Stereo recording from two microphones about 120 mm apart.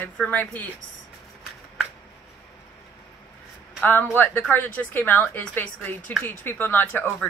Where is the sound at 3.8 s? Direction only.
15° left (ahead or behind).